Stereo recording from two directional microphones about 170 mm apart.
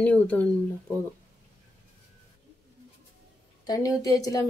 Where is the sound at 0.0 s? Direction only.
10° left (ahead or behind).